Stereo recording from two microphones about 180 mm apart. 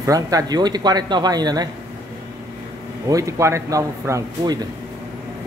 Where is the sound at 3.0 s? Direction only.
20° right (ahead or behind).